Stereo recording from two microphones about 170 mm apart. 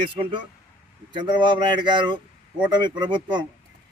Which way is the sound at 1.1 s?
25° right (ahead or behind).